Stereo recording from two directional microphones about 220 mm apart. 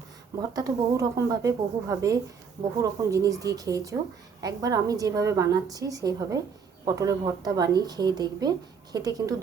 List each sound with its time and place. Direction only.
0.5 s speech: 15° right (ahead or behind)